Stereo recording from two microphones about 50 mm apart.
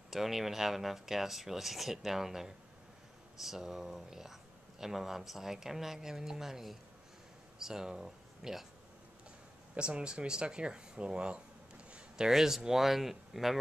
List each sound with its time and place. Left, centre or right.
0.1 s speech: centre
9.8 s speech: centre
12.3 s speech: centre